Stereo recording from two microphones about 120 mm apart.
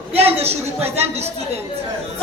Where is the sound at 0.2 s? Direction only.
55° right (ahead or behind).